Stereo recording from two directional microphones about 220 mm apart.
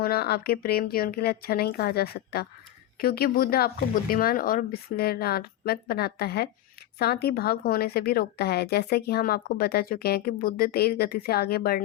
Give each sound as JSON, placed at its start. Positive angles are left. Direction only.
{"t": 0.0, "sound": "a woman's voice", "side_deg": 45}